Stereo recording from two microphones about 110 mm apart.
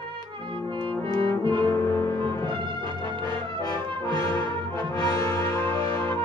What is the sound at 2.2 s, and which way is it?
Music, 45° right (ahead or behind).